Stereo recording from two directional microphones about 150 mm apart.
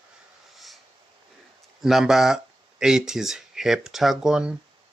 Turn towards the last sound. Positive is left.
turn(degrees=-5)  # may be behind; listen again after turning